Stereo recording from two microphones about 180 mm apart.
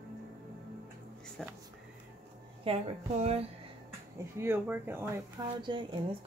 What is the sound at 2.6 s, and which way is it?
Speech, 35° right (ahead or behind).